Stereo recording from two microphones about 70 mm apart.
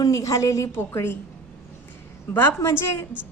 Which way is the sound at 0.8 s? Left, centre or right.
Left.